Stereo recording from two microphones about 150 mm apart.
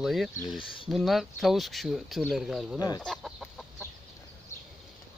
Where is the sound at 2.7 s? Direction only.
25° left (ahead or behind).